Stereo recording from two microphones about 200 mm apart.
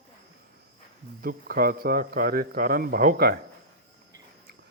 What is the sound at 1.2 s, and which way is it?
Speech, 50° right (ahead or behind).